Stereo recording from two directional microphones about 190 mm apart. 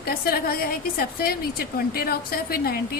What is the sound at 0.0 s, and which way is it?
A woman's voice, 50° left (ahead or behind).